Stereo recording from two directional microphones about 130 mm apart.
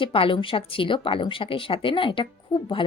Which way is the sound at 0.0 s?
45° left (ahead or behind).